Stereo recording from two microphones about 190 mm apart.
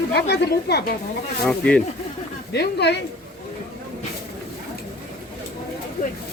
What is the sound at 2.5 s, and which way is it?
Speech, 60° left (ahead or behind).